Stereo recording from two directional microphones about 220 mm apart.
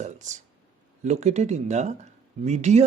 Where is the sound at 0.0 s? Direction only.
35° right (ahead or behind).